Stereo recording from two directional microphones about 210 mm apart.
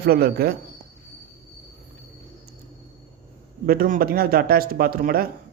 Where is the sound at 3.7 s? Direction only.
45° right (ahead or behind).